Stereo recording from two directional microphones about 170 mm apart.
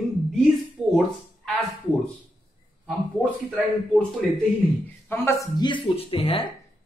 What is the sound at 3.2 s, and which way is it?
Speech, 5° left (ahead or behind).